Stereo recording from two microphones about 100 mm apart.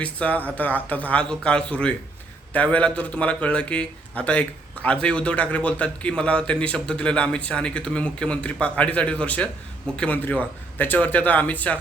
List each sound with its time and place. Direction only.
0.0 s a man's voice: 15° left (ahead or behind)